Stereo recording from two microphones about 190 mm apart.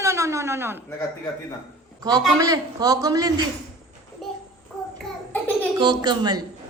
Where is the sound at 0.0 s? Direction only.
15° right (ahead or behind).